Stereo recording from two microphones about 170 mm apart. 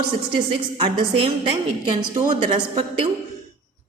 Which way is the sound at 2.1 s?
20° right (ahead or behind).